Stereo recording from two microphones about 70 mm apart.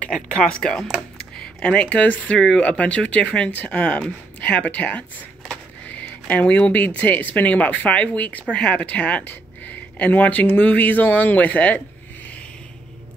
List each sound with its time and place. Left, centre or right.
0.0 s speech: centre
2.3 s speech: centre